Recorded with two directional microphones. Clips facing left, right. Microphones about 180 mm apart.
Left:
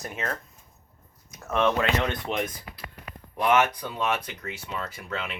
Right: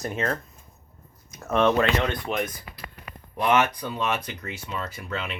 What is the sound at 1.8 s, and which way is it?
Speech, 25° left (ahead or behind).